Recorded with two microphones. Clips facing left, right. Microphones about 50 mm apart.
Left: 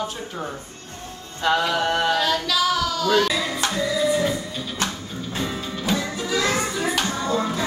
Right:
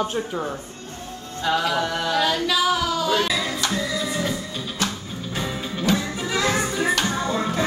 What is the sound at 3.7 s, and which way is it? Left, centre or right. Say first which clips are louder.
Music: left 4 dB; centre.